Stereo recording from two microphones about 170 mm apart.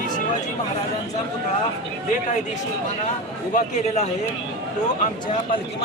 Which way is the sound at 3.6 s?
40° left (ahead or behind).